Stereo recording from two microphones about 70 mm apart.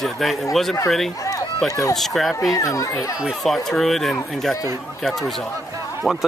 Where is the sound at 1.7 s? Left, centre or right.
Left.